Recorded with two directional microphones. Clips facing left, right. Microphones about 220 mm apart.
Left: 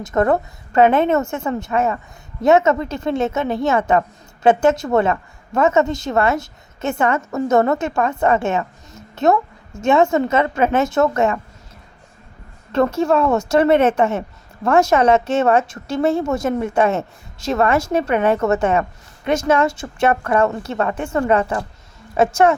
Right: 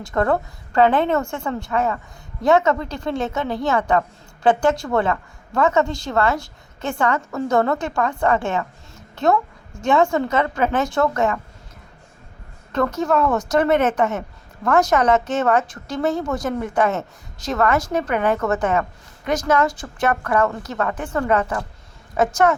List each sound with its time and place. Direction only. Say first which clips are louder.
0.0 s a woman's voice: left 3 dB; 20° left (ahead or behind)
12.7 s a woman's voice: left 3 dB; 25° left (ahead or behind)